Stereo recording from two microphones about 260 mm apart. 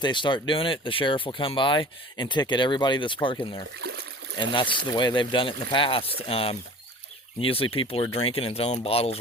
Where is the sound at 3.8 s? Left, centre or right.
Right.